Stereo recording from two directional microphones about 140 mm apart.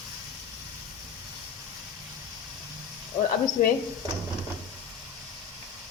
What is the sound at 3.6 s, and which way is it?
Speech, 70° left (ahead or behind).